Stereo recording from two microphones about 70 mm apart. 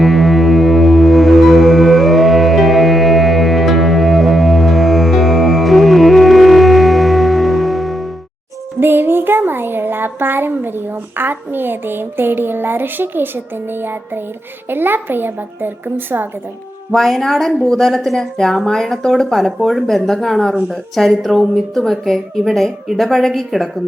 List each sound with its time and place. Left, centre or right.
0.0 s music: centre
8.8 s a woman's voice: right
16.9 s speech: centre